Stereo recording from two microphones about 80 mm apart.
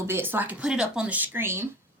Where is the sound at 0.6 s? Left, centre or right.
Centre; by 1.6 s right.